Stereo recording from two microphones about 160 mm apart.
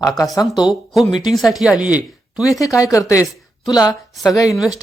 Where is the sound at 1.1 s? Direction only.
25° left (ahead or behind).